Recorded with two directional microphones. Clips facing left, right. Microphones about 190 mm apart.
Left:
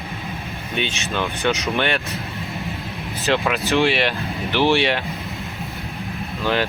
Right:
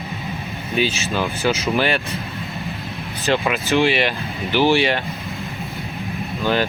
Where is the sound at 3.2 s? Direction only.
Centre (ahead or behind).